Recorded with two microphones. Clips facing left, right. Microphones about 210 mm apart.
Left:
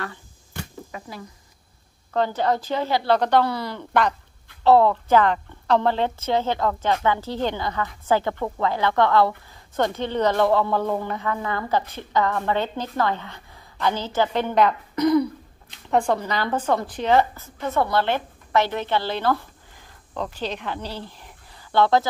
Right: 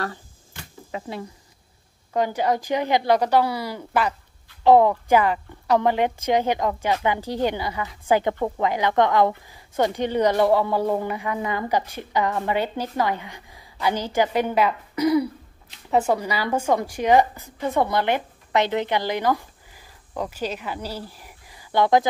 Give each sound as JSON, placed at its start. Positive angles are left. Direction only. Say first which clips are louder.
{"t": 0.9, "sound": "speech", "louder": "right 7 dB", "side_deg": -25}
{"t": 2.1, "sound": "a woman's voice", "louder": "even", "side_deg": -10}